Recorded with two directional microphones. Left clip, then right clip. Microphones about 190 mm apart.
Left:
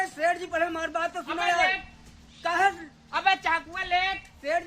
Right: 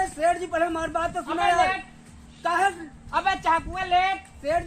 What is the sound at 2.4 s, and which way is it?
Speech, centre (ahead or behind).